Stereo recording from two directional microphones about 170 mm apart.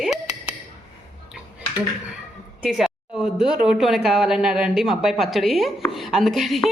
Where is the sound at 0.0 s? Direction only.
Centre (ahead or behind).